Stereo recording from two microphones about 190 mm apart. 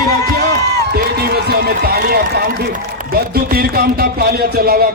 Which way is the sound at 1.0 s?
55° right (ahead or behind).